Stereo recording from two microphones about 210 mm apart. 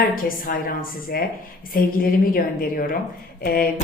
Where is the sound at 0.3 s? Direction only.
45° left (ahead or behind).